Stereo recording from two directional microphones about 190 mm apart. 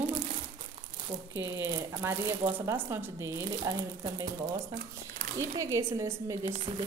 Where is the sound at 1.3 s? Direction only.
15° right (ahead or behind).